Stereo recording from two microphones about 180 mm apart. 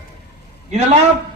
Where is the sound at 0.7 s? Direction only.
35° right (ahead or behind).